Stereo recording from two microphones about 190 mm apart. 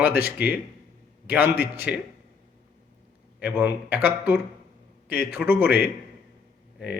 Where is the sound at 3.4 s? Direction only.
10° right (ahead or behind).